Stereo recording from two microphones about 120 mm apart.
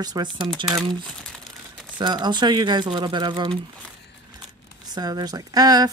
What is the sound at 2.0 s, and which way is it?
Speech, 40° right (ahead or behind).